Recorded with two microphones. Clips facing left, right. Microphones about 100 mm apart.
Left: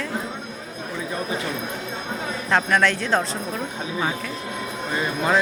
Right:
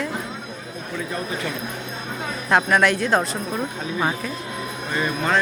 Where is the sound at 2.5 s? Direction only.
10° right (ahead or behind).